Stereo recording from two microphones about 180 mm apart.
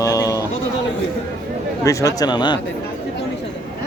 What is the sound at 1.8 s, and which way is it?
Speech, 20° left (ahead or behind).